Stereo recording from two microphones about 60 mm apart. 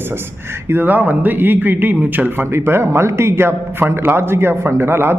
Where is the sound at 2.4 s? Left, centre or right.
Right.